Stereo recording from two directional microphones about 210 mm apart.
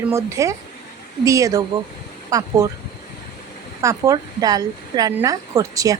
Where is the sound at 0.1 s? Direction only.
15° right (ahead or behind).